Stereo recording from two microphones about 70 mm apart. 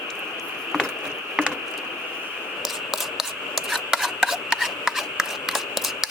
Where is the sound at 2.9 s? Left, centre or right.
Centre.